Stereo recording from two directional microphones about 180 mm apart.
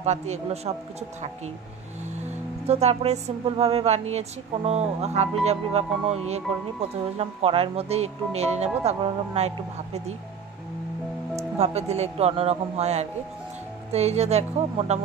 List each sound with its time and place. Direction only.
0.0 s speech: 40° right (ahead or behind)
2.1 s speech: 40° right (ahead or behind)
11.3 s speech: 35° right (ahead or behind)